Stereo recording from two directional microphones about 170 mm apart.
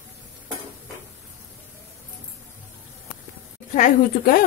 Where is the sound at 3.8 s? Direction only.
55° left (ahead or behind).